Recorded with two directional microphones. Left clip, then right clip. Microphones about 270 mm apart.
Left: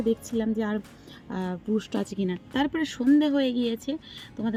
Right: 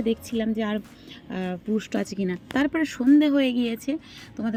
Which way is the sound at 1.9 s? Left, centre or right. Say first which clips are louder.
Right 2 dB; centre.